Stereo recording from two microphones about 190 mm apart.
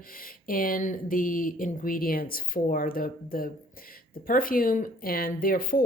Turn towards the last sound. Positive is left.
turn(degrees=50)  # may be behind; listen again after turning